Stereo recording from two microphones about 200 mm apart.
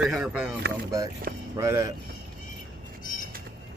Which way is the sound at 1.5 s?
15° right (ahead or behind).